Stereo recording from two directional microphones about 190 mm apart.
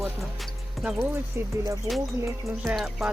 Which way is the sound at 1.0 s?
15° right (ahead or behind).